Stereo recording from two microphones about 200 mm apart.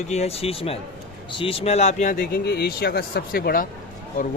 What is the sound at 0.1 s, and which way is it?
Speech, 30° left (ahead or behind).